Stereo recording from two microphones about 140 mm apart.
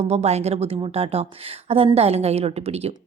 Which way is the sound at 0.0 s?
50° right (ahead or behind).